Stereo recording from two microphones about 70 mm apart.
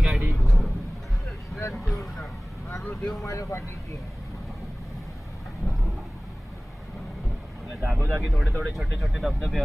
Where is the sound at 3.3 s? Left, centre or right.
Left.